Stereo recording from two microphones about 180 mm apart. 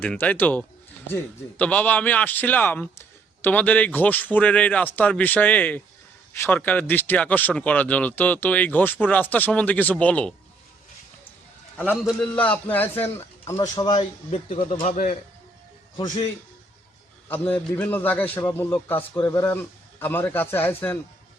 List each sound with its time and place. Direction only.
0.0 s a man's voice: 10° left (ahead or behind)
12.2 s a man's voice: 10° left (ahead or behind); by 14.0 s 25° left (ahead or behind)
14.3 s speech: 35° left (ahead or behind)
17.2 s a man's voice: 10° left (ahead or behind)